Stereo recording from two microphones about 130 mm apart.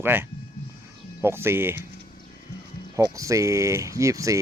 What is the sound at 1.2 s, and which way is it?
Speech, 20° right (ahead or behind).